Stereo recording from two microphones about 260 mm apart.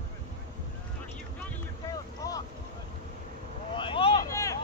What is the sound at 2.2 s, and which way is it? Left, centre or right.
Boat, centre.